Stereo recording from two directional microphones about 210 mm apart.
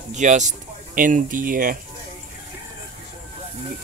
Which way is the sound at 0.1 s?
35° right (ahead or behind).